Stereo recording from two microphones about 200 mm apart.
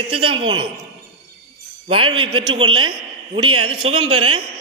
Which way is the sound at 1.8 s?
25° right (ahead or behind).